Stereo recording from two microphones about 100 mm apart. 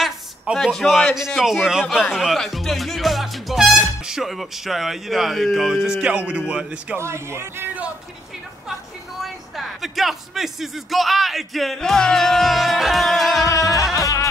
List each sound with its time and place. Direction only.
0.0 s a man's voice: centre (ahead or behind)
7.0 s a man's voice: 25° right (ahead or behind)
9.2 s speech: centre (ahead or behind)
13.9 s music: 35° left (ahead or behind)